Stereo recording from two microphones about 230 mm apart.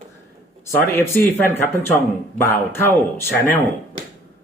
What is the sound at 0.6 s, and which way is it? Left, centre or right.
Speech, centre.